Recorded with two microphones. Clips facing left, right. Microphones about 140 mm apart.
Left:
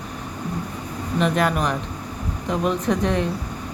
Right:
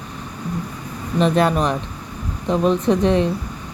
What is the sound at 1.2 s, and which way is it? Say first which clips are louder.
A woman's voice: right 4 dB; 30° right (ahead or behind).